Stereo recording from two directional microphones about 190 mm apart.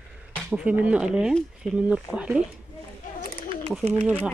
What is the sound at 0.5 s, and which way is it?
Speech, 10° right (ahead or behind).